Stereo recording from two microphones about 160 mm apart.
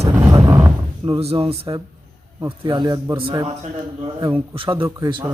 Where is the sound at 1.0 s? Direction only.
35° right (ahead or behind).